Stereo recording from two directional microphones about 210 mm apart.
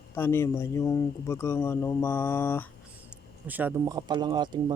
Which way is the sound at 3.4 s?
10° right (ahead or behind).